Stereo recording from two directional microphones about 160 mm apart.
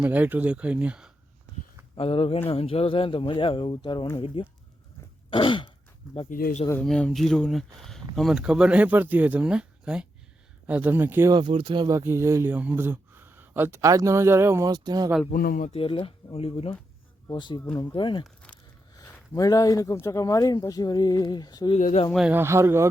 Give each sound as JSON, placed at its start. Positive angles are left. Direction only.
{"t": 0.0, "sound": "speech", "side_deg": -10}
{"t": 2.0, "sound": "speech", "side_deg": 35}
{"t": 5.3, "sound": "throat clearing", "side_deg": 30}
{"t": 6.3, "sound": "speech", "side_deg": 60}
{"t": 6.8, "sound": "speech", "side_deg": 5}
{"t": 11.3, "sound": "speech", "side_deg": -30}
{"t": 15.3, "sound": "speech", "side_deg": 65}
{"t": 15.7, "sound": "speech", "side_deg": 35}
{"t": 21.8, "sound": "speech", "side_deg": 50}
{"t": 22.1, "sound": "speech", "side_deg": -5}